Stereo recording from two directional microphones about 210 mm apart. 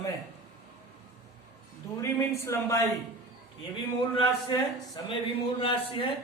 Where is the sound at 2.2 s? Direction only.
15° left (ahead or behind).